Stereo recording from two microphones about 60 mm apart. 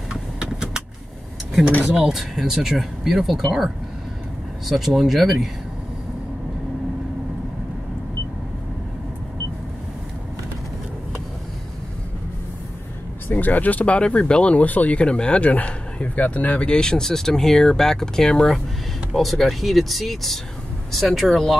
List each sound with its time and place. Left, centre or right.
0.1 s vehicle: centre
2.0 s speech: centre
13.3 s speech: left; by 21.5 s centre